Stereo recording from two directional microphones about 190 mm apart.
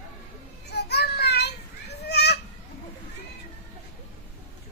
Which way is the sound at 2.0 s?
60° left (ahead or behind).